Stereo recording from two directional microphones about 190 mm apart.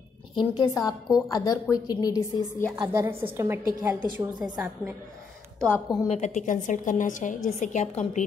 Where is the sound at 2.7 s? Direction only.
15° right (ahead or behind).